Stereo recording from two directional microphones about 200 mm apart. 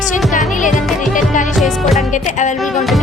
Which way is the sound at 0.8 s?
Centre (ahead or behind).